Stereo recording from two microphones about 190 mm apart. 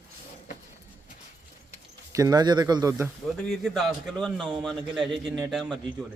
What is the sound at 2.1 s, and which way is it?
Speech, 20° right (ahead or behind).